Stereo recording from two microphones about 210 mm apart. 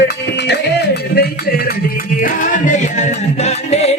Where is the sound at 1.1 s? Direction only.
50° left (ahead or behind).